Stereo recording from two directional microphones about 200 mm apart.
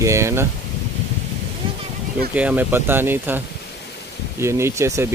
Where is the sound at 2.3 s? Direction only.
10° right (ahead or behind).